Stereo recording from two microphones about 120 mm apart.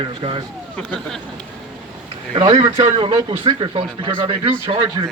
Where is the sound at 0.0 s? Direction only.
50° right (ahead or behind).